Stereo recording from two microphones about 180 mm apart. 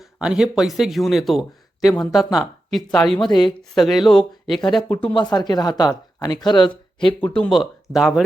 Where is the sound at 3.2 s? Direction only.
25° left (ahead or behind).